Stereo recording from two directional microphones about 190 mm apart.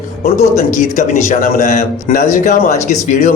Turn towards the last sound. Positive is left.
turn(degrees=40)  # may be behind; listen again after turning